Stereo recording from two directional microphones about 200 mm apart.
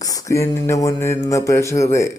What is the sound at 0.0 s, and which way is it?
Speech, 20° left (ahead or behind).